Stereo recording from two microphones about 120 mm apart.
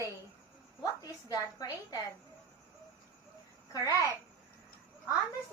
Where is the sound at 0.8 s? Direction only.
30° left (ahead or behind).